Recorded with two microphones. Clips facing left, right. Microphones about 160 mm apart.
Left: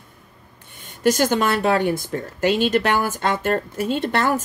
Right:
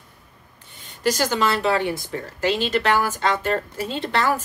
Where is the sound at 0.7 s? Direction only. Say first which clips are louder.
Left 4 dB; 50° left (ahead or behind).